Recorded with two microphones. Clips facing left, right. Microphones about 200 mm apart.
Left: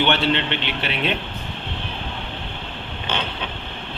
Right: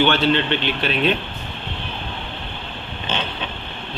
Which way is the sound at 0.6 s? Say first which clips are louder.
Right 4 dB; 20° left (ahead or behind).